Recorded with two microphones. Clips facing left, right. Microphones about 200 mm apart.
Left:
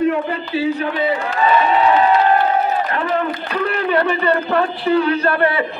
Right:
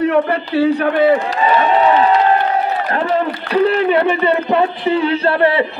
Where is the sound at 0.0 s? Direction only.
70° right (ahead or behind).